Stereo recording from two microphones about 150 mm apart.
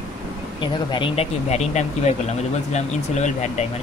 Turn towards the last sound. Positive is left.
turn(degrees=50)  # may be behind; listen again after turning